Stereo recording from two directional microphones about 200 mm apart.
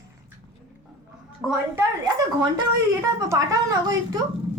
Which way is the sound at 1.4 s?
Centre (ahead or behind).